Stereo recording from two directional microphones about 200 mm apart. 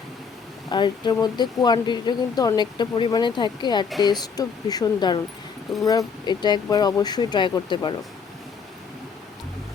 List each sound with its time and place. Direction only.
0.7 s speech: 20° left (ahead or behind)